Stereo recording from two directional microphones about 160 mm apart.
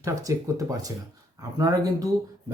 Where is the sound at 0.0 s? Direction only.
20° right (ahead or behind).